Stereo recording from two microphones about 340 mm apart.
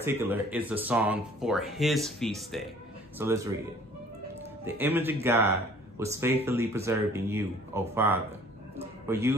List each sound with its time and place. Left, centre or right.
0.0 s speech: centre
4.7 s speech: centre
8.7 s music: centre